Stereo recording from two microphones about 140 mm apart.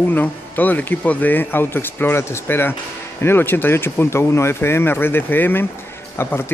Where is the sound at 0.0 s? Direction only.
15° left (ahead or behind).